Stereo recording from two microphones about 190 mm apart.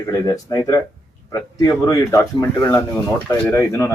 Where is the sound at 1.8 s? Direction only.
15° left (ahead or behind).